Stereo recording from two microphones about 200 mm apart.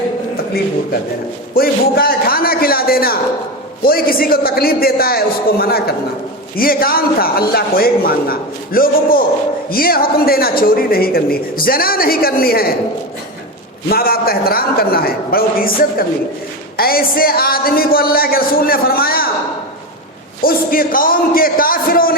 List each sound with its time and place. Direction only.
1.5 s a man's voice: 50° left (ahead or behind)
13.9 s a man's voice: 50° left (ahead or behind)
20.4 s a man's voice: 45° left (ahead or behind)